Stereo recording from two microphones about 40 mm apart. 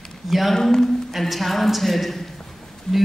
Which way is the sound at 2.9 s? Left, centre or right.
Centre.